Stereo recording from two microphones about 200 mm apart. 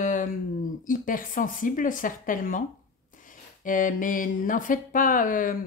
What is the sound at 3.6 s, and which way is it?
Speech, 40° left (ahead or behind).